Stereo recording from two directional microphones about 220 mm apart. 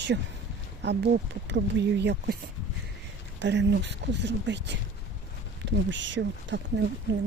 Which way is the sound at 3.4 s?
55° right (ahead or behind).